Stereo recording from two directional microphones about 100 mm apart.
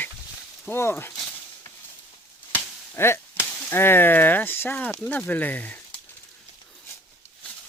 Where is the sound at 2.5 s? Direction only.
25° left (ahead or behind).